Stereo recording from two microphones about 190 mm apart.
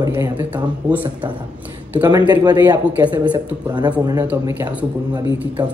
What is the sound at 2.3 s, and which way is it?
Speech, 20° right (ahead or behind).